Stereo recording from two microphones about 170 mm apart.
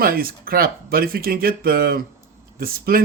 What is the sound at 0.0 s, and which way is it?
Speech, 60° right (ahead or behind).